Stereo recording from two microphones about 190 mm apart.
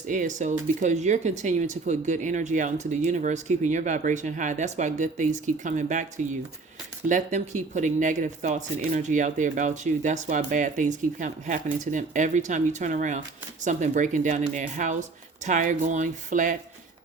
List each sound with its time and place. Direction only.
0.1 s speech: 40° right (ahead or behind)
7.1 s speech: 40° right (ahead or behind)